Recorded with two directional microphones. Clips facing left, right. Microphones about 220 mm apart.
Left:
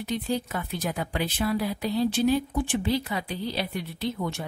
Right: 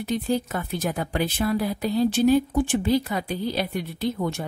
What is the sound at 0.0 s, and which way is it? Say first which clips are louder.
A woman's voice: right 4 dB; 45° right (ahead or behind).